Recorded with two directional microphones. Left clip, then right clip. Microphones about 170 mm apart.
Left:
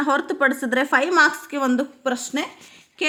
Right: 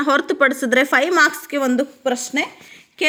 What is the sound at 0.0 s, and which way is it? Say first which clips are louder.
Speech: right 4 dB; 10° right (ahead or behind).